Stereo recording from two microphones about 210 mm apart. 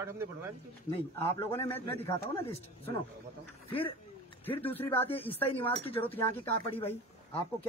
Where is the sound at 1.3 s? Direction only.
25° left (ahead or behind).